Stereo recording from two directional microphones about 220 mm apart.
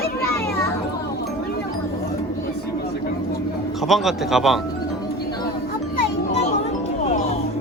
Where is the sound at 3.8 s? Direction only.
Centre (ahead or behind).